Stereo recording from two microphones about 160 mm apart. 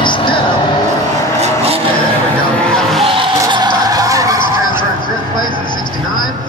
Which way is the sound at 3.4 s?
25° right (ahead or behind).